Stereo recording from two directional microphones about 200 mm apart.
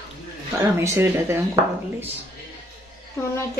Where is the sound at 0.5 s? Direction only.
15° right (ahead or behind).